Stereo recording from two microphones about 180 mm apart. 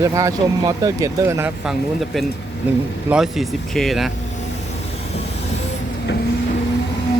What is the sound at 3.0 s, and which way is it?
Speech, 5° right (ahead or behind).